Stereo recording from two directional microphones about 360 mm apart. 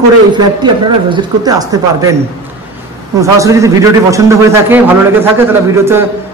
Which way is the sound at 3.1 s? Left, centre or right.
Centre.